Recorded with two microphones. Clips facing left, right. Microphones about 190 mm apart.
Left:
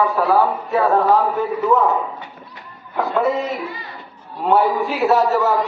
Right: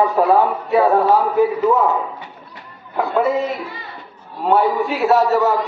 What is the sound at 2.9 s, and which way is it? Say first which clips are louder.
A man's voice: right 1 dB; centre (ahead or behind).